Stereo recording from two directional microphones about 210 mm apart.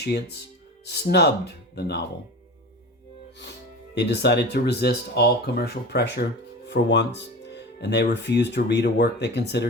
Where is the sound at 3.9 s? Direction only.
55° left (ahead or behind).